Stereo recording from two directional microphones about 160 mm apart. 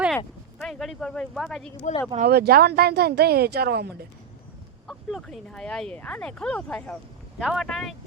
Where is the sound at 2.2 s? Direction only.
80° right.